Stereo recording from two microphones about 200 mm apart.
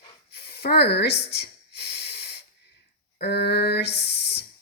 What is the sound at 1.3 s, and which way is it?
Snort, 55° left (ahead or behind).